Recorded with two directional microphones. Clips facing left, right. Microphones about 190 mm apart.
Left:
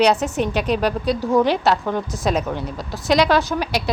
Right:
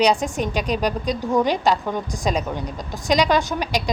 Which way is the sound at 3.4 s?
5° left (ahead or behind).